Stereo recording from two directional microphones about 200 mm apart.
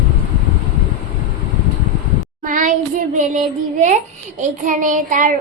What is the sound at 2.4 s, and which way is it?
A child's voice, 40° right (ahead or behind).